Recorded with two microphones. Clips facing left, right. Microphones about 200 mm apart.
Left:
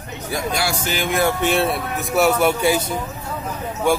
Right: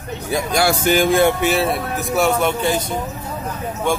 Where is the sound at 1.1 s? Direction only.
25° right (ahead or behind).